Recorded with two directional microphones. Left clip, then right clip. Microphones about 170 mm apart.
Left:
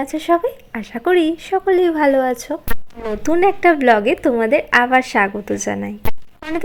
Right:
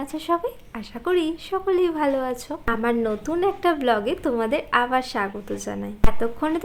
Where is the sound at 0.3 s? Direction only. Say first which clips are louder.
Left 8 dB; 35° left (ahead or behind).